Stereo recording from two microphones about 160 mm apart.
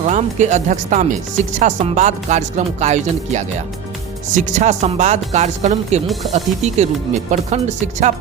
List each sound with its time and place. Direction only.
0.0 s speech: 45° right (ahead or behind)